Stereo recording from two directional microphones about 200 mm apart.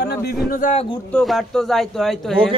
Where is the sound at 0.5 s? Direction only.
35° left (ahead or behind).